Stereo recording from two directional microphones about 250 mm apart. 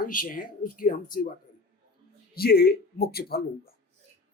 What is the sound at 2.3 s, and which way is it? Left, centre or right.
Speech, left.